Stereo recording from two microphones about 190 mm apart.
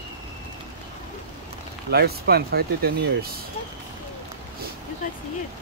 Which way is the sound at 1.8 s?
55° right (ahead or behind).